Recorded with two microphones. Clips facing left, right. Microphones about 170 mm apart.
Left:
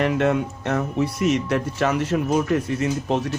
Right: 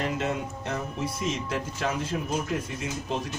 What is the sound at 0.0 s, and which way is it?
Speech, 65° left (ahead or behind).